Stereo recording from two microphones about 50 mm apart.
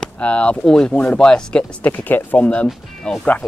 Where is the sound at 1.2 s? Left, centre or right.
Centre.